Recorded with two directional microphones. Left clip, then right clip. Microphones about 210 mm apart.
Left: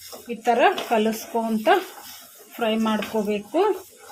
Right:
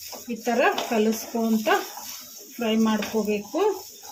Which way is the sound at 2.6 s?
50° left (ahead or behind).